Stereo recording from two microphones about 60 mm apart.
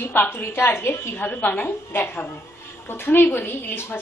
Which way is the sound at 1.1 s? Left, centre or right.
Left.